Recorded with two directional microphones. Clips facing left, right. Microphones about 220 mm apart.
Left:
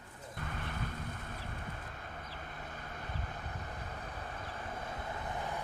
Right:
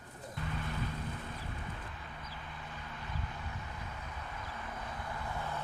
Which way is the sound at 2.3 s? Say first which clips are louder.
Left 1 dB; 50° left (ahead or behind).